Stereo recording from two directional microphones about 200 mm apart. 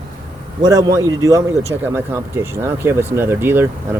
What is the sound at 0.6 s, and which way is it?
Speech, 20° right (ahead or behind).